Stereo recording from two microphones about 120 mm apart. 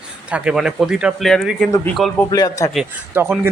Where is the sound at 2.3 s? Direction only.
30° left (ahead or behind).